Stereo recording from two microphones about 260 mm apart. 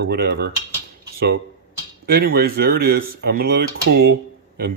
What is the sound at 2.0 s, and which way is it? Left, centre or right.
Speech, right.